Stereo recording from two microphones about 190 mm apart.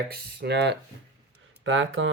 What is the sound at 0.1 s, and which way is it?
Speech, 55° right (ahead or behind).